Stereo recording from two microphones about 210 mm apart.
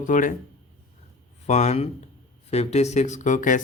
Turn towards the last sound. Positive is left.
turn(degrees=35)  # may be behind; listen again after turning